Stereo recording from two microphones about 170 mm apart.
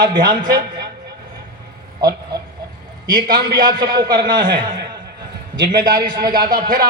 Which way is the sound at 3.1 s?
25° right (ahead or behind).